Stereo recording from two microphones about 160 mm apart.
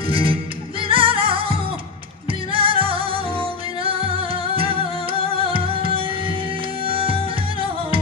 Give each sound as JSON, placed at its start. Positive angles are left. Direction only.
{"t": 0.1, "sound": "music", "side_deg": -35}